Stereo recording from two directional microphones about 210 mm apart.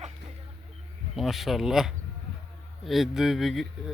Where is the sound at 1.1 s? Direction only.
Centre (ahead or behind).